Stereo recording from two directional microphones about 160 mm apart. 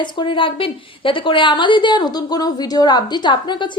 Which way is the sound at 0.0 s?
30° left (ahead or behind).